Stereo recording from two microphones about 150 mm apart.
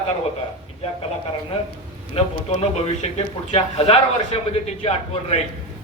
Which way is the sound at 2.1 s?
40° left (ahead or behind).